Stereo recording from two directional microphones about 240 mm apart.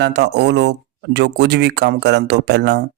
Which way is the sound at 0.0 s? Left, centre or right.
Right.